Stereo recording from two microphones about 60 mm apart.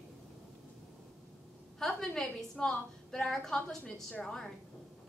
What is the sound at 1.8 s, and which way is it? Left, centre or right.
A woman's voice, centre.